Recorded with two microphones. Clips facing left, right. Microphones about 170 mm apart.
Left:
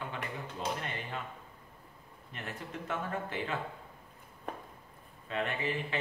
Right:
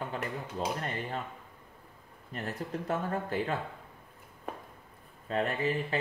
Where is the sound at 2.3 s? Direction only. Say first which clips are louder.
Right 6 dB; 40° right (ahead or behind).